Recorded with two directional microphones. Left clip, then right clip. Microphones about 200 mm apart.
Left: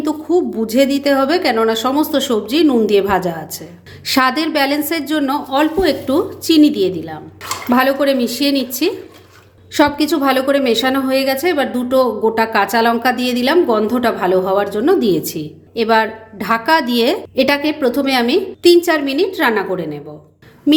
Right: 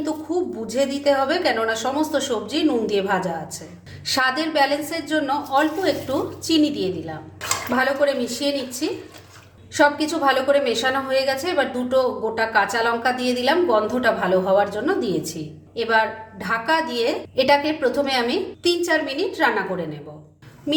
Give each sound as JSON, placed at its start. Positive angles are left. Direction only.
{"t": 0.0, "sound": "a woman's voice", "side_deg": 45}